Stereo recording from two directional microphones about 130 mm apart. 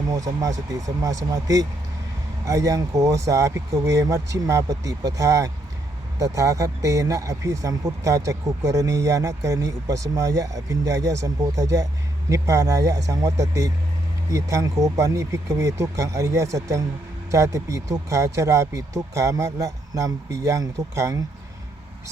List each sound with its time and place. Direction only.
0.1 s speech: 25° right (ahead or behind)